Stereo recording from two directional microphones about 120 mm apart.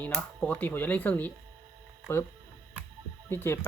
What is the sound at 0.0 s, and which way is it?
Speech, 10° left (ahead or behind).